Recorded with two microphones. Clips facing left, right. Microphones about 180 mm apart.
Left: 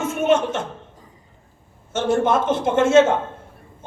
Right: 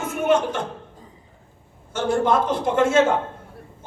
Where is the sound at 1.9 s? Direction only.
25° left (ahead or behind).